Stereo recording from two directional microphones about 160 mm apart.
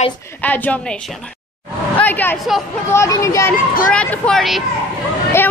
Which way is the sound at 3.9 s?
5° left (ahead or behind).